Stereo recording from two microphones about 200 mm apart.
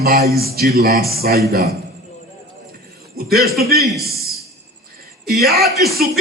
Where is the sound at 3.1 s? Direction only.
50° right (ahead or behind).